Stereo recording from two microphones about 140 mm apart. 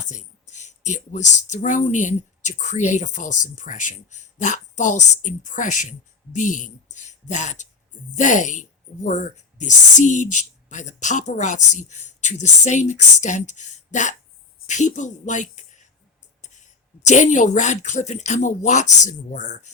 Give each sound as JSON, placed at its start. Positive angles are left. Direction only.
{"t": 0.0, "sound": "speech", "side_deg": 60}